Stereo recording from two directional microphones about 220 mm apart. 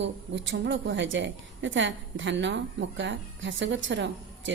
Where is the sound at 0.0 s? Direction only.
55° right (ahead or behind).